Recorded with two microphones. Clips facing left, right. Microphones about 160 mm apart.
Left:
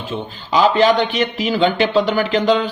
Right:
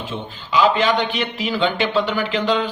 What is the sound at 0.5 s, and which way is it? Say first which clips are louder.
Speech: left 3 dB; 35° left (ahead or behind).